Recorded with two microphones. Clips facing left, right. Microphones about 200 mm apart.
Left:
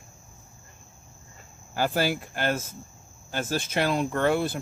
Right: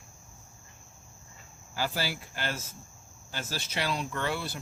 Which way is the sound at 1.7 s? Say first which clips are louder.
Left 7 dB; 50° left (ahead or behind).